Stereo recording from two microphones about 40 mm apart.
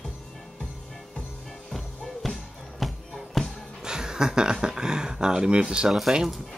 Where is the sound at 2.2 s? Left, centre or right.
Centre.